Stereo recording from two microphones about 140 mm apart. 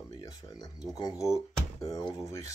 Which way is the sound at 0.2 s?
25° left (ahead or behind).